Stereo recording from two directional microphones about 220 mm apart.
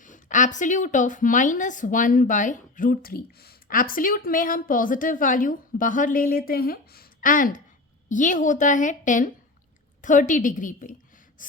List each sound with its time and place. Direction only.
0.0 s a woman's voice: 35° left (ahead or behind)